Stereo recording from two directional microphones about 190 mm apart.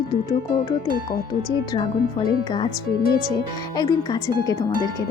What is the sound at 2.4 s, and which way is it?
Speech, 25° left (ahead or behind).